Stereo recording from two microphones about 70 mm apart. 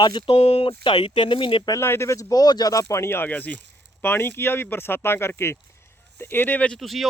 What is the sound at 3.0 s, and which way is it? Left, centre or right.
Speech, left.